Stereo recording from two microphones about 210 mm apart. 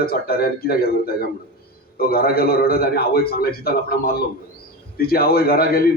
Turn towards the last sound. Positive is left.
turn(degrees=45)  # may be behind; listen again after turning